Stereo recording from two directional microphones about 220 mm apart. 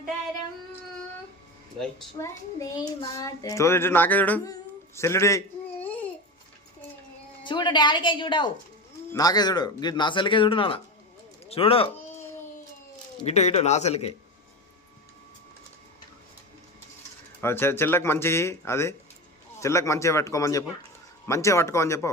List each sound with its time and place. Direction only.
2.1 s a child's voice: 15° left (ahead or behind)
7.4 s speech: 20° left (ahead or behind)
13.2 s speech: 30° left (ahead or behind)
17.4 s a child's voice: 10° left (ahead or behind)